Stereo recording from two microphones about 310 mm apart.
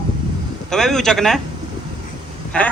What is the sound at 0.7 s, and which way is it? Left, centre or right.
Speech, centre.